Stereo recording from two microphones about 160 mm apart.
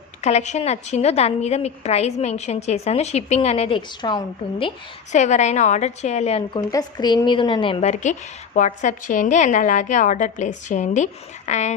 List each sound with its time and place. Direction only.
0.2 s a woman's voice: 45° left (ahead or behind); by 4.2 s 30° left (ahead or behind)
5.1 s a woman's voice: 50° left (ahead or behind)
6.6 s a woman's voice: 25° left (ahead or behind); by 11.7 s 45° left (ahead or behind)